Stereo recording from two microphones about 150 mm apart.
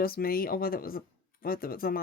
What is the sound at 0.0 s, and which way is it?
Speech, 80° left.